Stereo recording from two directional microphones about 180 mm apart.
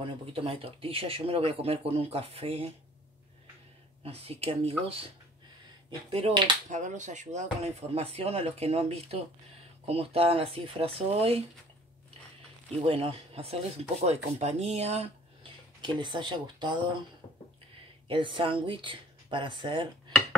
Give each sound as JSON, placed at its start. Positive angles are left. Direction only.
{"t": 0.0, "sound": "speech", "side_deg": -30}
{"t": 4.0, "sound": "speech", "side_deg": -35}
{"t": 6.7, "sound": "speech", "side_deg": -40}
{"t": 12.8, "sound": "speech", "side_deg": -30}
{"t": 15.8, "sound": "speech", "side_deg": -25}
{"t": 18.0, "sound": "speech", "side_deg": -25}